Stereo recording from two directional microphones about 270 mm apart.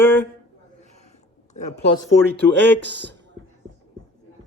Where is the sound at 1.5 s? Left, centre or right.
Left.